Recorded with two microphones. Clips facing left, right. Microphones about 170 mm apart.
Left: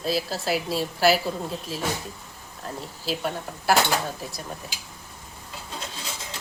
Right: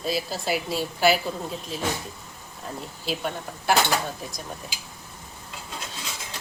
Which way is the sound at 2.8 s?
Centre (ahead or behind).